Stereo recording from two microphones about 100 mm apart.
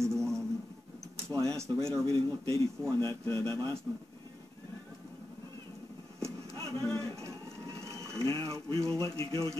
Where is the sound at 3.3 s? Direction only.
45° right (ahead or behind).